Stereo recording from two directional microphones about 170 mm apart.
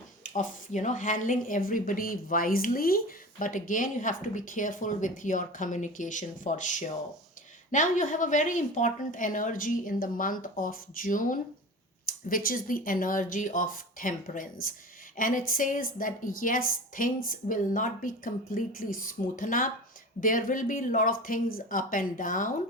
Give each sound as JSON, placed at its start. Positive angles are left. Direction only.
{"t": 0.2, "sound": "speech", "side_deg": 45}